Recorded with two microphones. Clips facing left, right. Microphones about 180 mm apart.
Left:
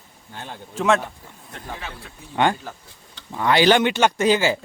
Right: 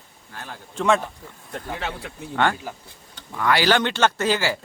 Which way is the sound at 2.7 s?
10° right (ahead or behind).